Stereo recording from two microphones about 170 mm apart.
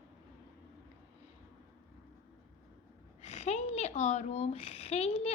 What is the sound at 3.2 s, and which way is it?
Speech, 40° left (ahead or behind).